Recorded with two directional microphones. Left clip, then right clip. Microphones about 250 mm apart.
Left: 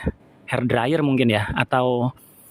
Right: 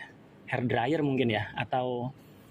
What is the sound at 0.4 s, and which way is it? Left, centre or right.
Speech, left.